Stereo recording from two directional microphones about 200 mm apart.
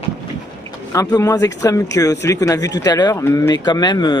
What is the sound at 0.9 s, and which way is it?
Speech, 15° left (ahead or behind).